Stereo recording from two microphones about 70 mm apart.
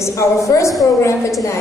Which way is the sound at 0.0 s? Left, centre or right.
Left.